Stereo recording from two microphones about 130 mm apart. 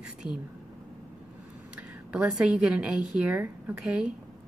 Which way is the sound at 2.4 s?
5° right (ahead or behind).